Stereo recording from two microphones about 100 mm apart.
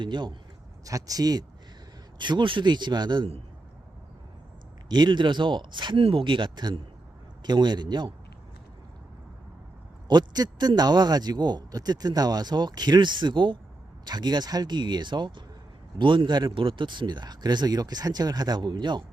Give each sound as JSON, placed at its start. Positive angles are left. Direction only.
{"t": 0.0, "sound": "a man's voice", "side_deg": -50}
{"t": 0.9, "sound": "a man's voice", "side_deg": -35}
{"t": 4.9, "sound": "a man's voice", "side_deg": -50}
{"t": 6.0, "sound": "a man's voice", "side_deg": -65}
{"t": 10.1, "sound": "a man's voice", "side_deg": -45}